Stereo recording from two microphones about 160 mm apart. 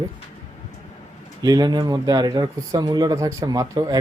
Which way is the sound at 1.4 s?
25° right (ahead or behind).